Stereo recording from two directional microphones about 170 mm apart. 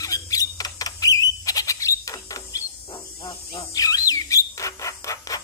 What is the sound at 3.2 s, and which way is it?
Bird, 25° left (ahead or behind).